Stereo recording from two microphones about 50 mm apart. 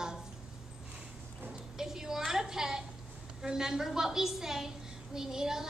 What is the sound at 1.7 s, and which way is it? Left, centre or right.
A woman's voice, centre.